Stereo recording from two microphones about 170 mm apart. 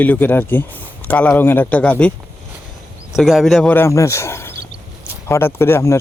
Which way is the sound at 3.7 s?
15° left (ahead or behind).